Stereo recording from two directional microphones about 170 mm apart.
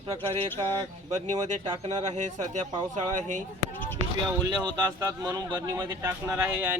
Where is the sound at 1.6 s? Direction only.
25° right (ahead or behind).